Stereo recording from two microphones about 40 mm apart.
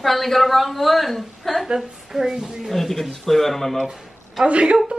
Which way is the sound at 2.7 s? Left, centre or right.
Centre.